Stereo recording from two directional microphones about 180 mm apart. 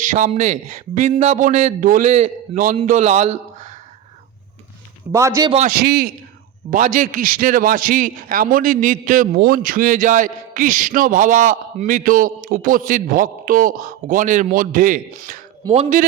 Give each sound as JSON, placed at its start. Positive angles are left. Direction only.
{"t": 0.0, "sound": "a man's voice", "side_deg": -45}
{"t": 5.1, "sound": "a man's voice", "side_deg": -15}
{"t": 5.6, "sound": "a man's voice", "side_deg": -60}
{"t": 6.7, "sound": "a man's voice", "side_deg": -45}
{"t": 15.7, "sound": "a man's voice", "side_deg": -35}